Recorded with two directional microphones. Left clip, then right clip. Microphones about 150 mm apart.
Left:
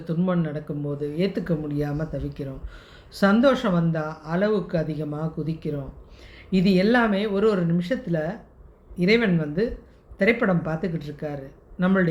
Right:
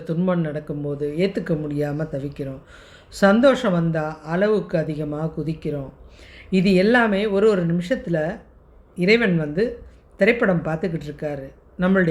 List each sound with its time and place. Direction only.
0.0 s speech: 50° right (ahead or behind)